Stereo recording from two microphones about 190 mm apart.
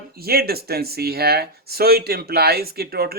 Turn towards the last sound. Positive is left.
turn(degrees=-55)  # may be behind; listen again after turning